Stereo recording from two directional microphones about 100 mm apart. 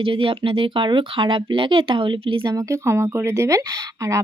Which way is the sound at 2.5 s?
30° right (ahead or behind).